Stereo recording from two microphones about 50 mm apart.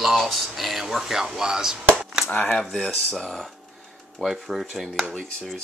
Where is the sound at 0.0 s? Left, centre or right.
Centre.